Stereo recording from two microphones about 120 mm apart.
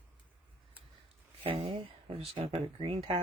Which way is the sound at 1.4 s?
50° right (ahead or behind).